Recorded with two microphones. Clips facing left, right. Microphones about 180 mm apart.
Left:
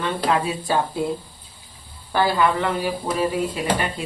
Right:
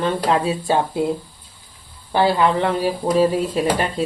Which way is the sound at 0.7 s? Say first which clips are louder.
Right 3 dB; 25° right (ahead or behind).